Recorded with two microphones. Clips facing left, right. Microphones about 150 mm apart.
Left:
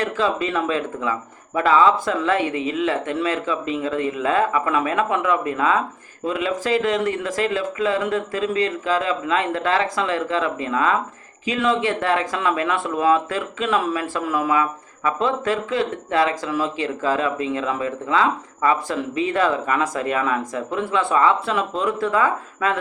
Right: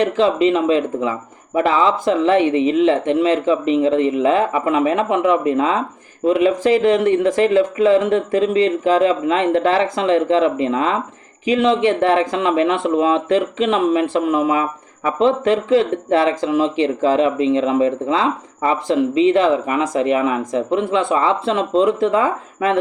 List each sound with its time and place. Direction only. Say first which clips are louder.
0.2 s speech: right 7 dB; 25° right (ahead or behind)